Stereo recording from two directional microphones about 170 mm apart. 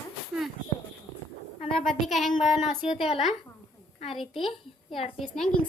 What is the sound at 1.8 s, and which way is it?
Speech, centre (ahead or behind).